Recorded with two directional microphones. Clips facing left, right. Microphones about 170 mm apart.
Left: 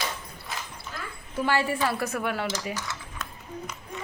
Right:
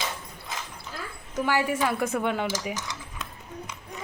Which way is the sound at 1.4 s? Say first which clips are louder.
Even; 15° right (ahead or behind).